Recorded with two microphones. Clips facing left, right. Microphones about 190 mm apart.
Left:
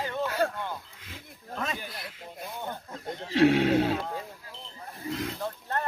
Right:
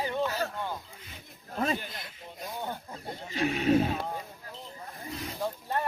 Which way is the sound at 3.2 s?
90° left.